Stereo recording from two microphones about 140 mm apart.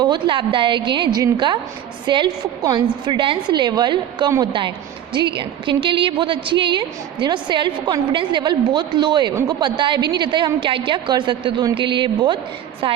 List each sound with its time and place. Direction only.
0.0 s a woman's voice: 35° right (ahead or behind)